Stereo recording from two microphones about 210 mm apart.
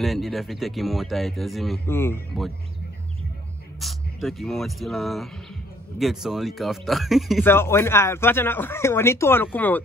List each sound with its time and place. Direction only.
0.0 s speech: centre (ahead or behind)
1.9 s speech: 10° left (ahead or behind)
2.3 s speech: centre (ahead or behind)
3.8 s speech: centre (ahead or behind)
7.4 s speech: 10° left (ahead or behind)